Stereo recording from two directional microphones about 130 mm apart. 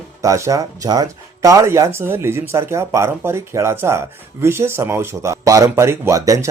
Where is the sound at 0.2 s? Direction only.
25° right (ahead or behind).